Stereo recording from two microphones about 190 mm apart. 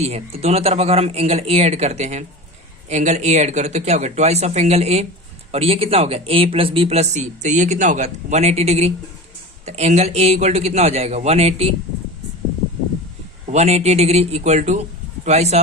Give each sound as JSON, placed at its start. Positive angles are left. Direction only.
{"t": 0.0, "sound": "speech", "side_deg": -30}
{"t": 13.5, "sound": "speech", "side_deg": -35}